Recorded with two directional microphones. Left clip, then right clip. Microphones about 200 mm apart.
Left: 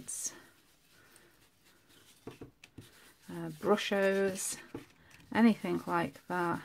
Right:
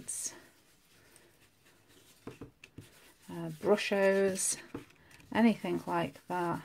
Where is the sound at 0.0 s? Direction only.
Centre (ahead or behind).